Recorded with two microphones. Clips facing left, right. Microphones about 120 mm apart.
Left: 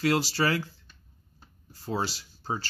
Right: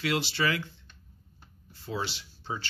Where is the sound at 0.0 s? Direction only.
40° left (ahead or behind).